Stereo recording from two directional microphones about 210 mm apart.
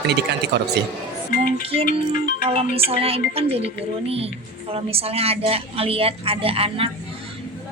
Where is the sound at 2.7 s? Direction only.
25° right (ahead or behind).